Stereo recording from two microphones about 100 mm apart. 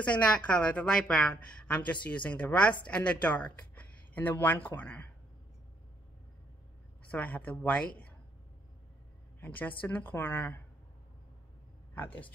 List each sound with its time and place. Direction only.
0.0 s a woman's voice: 10° left (ahead or behind)
7.1 s a woman's voice: 15° left (ahead or behind)
9.4 s speech: 20° left (ahead or behind)